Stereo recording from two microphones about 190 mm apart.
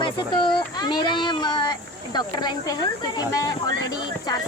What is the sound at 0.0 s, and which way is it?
Speech, 25° left (ahead or behind).